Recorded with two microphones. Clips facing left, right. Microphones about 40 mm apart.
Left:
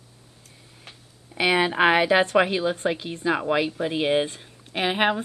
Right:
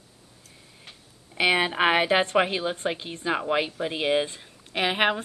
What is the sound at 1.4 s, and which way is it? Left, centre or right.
Speech, centre.